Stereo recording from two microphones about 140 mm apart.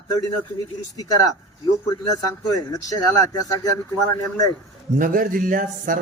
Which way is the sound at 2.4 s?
25° left (ahead or behind).